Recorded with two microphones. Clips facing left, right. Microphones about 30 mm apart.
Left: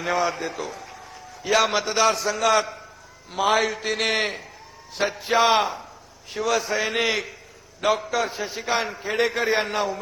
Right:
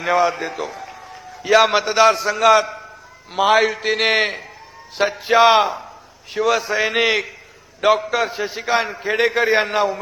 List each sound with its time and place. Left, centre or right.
0.0 s a man's voice: right